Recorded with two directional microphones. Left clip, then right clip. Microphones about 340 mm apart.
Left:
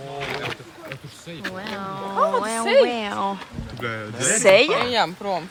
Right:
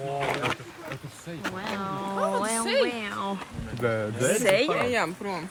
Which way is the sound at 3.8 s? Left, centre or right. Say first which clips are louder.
Right 2 dB; centre.